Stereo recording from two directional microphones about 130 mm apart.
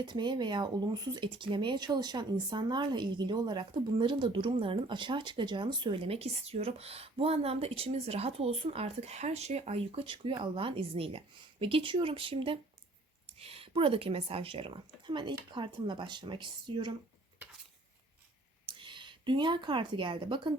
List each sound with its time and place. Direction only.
0.0 s speech: 35° right (ahead or behind)
18.6 s speech: 40° right (ahead or behind)